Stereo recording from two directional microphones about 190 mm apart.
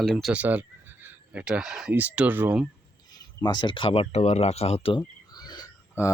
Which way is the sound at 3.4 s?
20° left (ahead or behind).